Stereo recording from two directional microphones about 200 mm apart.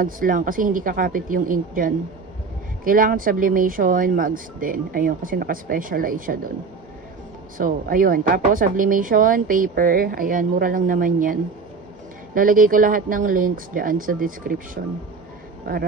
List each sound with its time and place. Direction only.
0.0 s speech: 45° right (ahead or behind)
7.5 s speech: 45° right (ahead or behind)
12.4 s speech: 45° right (ahead or behind)